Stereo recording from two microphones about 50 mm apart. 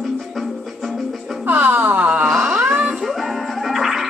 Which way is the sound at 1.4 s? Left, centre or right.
Right.